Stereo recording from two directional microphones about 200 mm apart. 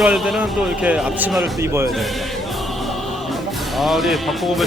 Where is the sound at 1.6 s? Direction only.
15° right (ahead or behind).